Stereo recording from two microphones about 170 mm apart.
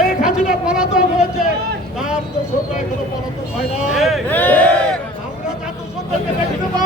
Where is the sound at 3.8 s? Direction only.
5° right (ahead or behind).